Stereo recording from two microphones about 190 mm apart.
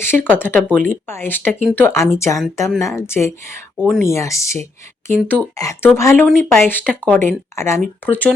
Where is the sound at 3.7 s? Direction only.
Centre (ahead or behind).